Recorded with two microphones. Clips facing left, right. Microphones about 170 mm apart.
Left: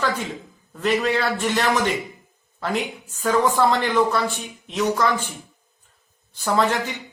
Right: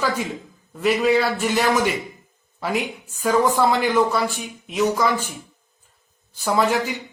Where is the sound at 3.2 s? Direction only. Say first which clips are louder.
Right 1 dB; 10° right (ahead or behind).